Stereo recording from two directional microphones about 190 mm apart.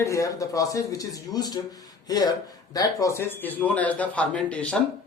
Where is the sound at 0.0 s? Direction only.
15° left (ahead or behind).